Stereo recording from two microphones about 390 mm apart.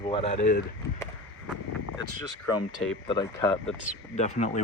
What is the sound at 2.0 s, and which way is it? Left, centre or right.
Speech, left.